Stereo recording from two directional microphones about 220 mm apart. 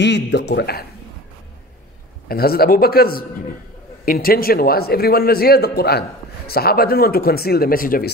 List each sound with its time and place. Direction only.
0.0 s a man's voice: 50° left (ahead or behind)
2.2 s a man's voice: 45° left (ahead or behind)